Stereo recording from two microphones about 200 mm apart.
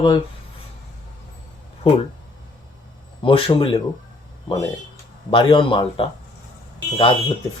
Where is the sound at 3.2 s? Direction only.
25° left (ahead or behind).